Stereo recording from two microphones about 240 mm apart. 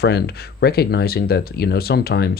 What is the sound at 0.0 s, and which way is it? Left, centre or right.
Speech, left.